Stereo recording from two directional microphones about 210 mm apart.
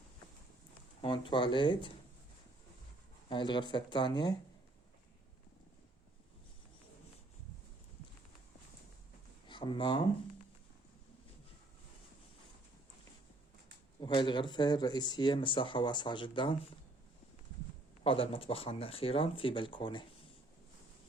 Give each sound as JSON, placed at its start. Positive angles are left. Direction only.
{"t": 1.0, "sound": "speech", "side_deg": 25}
{"t": 3.2, "sound": "speech", "side_deg": 20}
{"t": 9.5, "sound": "speech", "side_deg": 20}
{"t": 14.0, "sound": "speech", "side_deg": 20}
{"t": 18.0, "sound": "speech", "side_deg": 25}